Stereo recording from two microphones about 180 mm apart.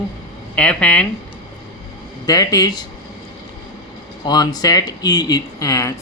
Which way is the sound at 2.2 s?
20° left (ahead or behind).